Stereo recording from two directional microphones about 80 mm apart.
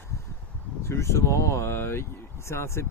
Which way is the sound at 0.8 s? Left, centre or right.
Left.